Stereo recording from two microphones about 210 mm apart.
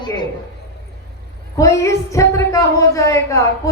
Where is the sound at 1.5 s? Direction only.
15° left (ahead or behind).